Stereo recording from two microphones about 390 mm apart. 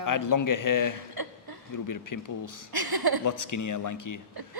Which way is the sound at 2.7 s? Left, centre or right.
Right.